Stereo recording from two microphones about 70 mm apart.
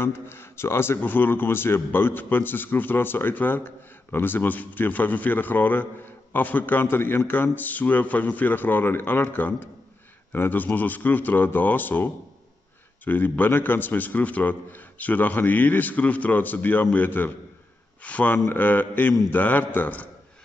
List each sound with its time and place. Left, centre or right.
0.0 s speech: left